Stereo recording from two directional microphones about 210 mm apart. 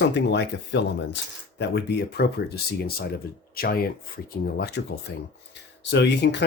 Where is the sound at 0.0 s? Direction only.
55° left (ahead or behind).